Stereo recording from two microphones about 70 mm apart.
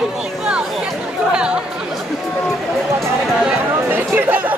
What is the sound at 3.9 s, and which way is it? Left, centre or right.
Speech, right.